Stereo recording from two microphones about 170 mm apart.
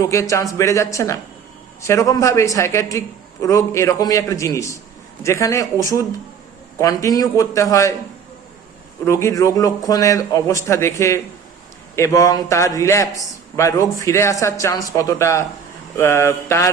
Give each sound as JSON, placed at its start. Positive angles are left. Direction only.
{"t": 0.0, "sound": "a man's voice", "side_deg": 20}
{"t": 9.0, "sound": "a man's voice", "side_deg": 15}